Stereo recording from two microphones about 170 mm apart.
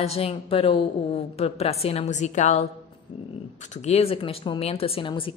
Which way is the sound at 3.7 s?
40° left (ahead or behind).